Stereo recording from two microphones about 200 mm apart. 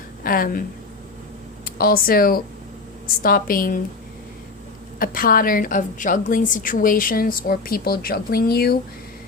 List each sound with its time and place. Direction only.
0.2 s a woman's voice: 45° left (ahead or behind)
1.6 s a woman's voice: 45° left (ahead or behind)
4.9 s a woman's voice: 45° left (ahead or behind)